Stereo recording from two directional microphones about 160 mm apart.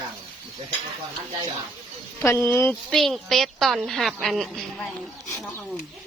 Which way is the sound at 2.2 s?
15° left (ahead or behind).